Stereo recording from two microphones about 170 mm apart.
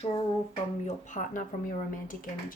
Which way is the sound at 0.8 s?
45° left (ahead or behind).